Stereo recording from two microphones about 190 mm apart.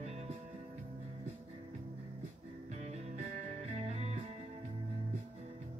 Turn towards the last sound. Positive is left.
turn(degrees=-35)  # may be behind; listen again after turning